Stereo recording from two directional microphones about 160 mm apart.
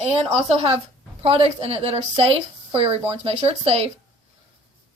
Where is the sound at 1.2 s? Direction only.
35° right (ahead or behind).